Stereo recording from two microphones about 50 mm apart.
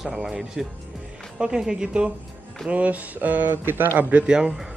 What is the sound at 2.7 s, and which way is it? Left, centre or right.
Speech, right.